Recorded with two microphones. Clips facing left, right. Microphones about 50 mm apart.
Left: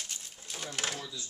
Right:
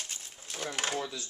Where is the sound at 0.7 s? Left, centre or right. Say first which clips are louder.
Right 3 dB; centre.